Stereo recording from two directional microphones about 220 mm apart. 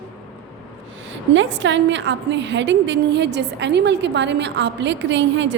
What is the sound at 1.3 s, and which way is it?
A woman's voice, 55° right (ahead or behind).